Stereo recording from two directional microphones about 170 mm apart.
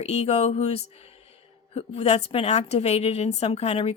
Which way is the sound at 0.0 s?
40° left (ahead or behind).